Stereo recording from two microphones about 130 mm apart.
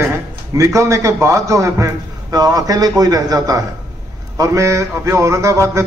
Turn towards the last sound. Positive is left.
turn(degrees=-20)  # may be behind; listen again after turning